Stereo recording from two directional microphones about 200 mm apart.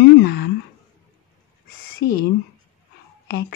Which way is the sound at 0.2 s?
55° left (ahead or behind).